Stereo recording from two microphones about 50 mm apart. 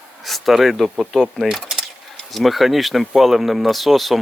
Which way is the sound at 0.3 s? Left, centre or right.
Centre.